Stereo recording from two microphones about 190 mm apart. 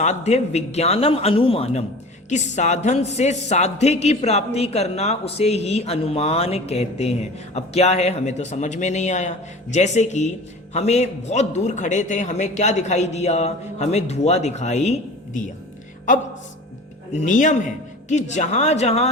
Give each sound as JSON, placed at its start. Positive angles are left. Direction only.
{"t": 0.0, "sound": "a woman's voice", "side_deg": 35}